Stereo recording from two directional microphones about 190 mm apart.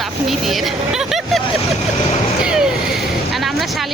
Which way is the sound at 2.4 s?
5° right (ahead or behind).